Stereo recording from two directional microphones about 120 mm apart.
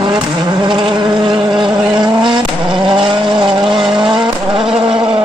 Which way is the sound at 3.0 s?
45° right (ahead or behind).